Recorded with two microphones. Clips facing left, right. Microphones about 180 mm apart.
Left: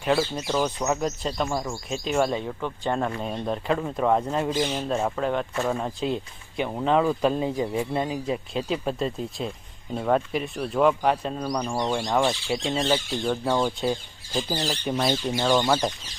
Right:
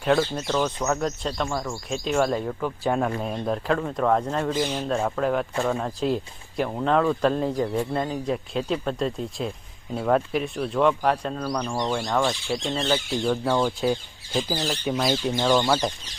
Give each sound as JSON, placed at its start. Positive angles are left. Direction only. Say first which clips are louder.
{"t": 0.0, "sound": "speech", "louder": "right 2 dB", "side_deg": 5}
{"t": 11.4, "sound": "speech", "louder": "even", "side_deg": 15}
{"t": 12.3, "sound": "speech", "louder": "even", "side_deg": 0}
{"t": 12.7, "sound": "speech", "louder": "left 1 dB", "side_deg": 10}
{"t": 13.2, "sound": "speech", "louder": "right 1 dB", "side_deg": 0}
{"t": 14.3, "sound": "speech", "louder": "right 1 dB", "side_deg": -5}
{"t": 15.5, "sound": "speech", "louder": "even", "side_deg": 10}